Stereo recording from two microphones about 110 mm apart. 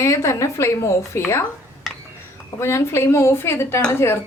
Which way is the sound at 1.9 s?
Centre (ahead or behind).